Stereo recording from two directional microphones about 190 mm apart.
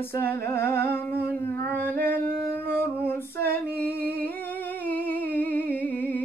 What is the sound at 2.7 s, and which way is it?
Female singing, 10° left (ahead or behind).